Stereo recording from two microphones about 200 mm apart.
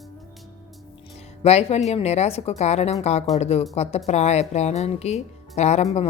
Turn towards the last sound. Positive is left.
turn(degrees=35)  # may be behind; listen again after turning